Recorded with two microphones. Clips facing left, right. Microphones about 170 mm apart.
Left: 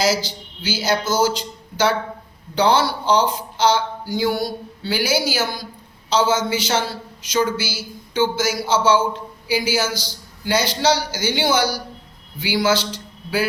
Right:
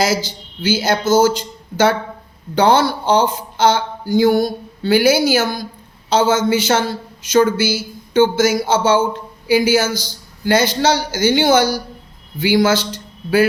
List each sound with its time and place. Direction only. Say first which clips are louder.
0.0 s speech: right 2 dB; 50° right (ahead or behind)